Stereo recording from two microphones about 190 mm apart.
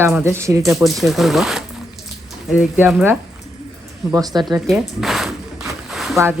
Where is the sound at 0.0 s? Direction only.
15° right (ahead or behind).